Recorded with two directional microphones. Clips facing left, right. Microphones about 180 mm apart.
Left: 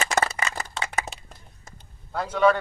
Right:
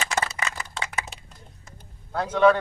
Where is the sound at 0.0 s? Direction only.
45° left (ahead or behind).